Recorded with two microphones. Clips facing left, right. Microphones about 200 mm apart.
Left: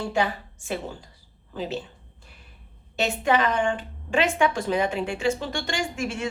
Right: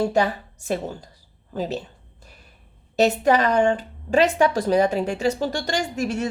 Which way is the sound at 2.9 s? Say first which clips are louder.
Right 5 dB; 40° right (ahead or behind).